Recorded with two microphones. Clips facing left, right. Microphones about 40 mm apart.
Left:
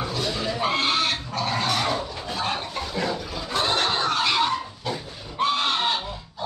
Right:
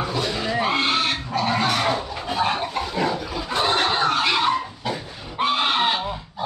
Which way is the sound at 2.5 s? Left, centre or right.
Centre.